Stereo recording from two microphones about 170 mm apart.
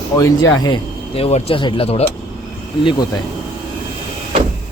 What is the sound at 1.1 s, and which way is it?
Speech, 35° left (ahead or behind).